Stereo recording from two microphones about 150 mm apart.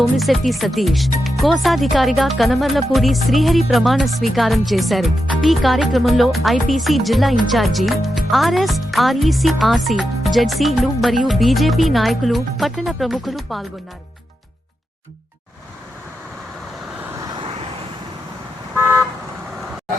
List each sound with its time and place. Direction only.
0.0 s speech: centre (ahead or behind)
17.3 s vehicle: 35° right (ahead or behind)